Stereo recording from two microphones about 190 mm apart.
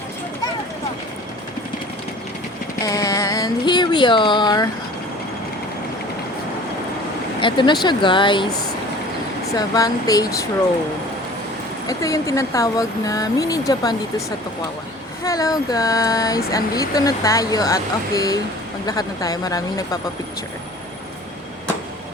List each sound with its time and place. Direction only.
2.8 s a sound: 15° left (ahead or behind)
7.4 s speech: 25° left (ahead or behind)
9.6 s speech: 20° left (ahead or behind)
11.9 s speech: 15° left (ahead or behind)
15.2 s speech: 15° left (ahead or behind)